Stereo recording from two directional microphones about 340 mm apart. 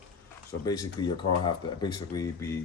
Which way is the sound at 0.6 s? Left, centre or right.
Centre.